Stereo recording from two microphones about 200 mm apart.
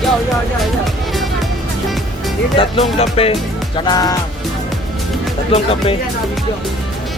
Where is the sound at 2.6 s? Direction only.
30° left (ahead or behind).